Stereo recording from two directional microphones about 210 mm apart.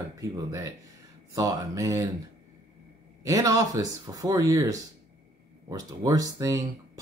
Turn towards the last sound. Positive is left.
turn(degrees=-15)  # may be behind; listen again after turning